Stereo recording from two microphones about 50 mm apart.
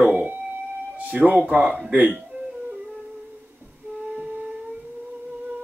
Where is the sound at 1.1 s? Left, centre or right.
Right.